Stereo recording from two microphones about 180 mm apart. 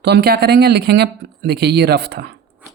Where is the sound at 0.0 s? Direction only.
65° right (ahead or behind).